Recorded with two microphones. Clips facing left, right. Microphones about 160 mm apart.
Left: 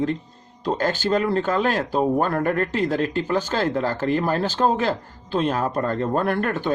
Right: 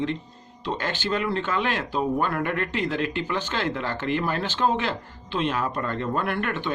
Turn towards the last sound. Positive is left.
turn(degrees=40)  # may be behind; listen again after turning